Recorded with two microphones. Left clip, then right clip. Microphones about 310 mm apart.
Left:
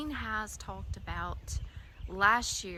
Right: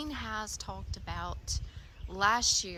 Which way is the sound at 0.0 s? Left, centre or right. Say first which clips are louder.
Left 2 dB; centre.